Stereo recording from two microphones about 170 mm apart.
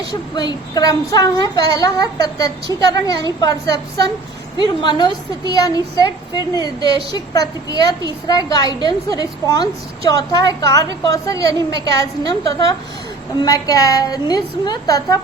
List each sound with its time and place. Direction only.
0.1 s a woman's voice: 25° left (ahead or behind)